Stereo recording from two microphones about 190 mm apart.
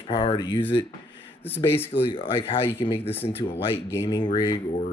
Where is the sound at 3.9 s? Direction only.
15° left (ahead or behind).